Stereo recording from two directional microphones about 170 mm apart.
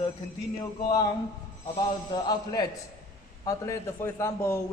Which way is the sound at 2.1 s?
25° left (ahead or behind).